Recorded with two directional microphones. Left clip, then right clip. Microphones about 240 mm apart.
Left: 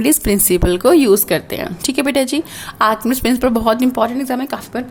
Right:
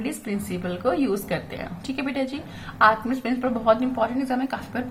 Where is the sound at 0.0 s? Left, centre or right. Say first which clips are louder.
Left 15 dB; left.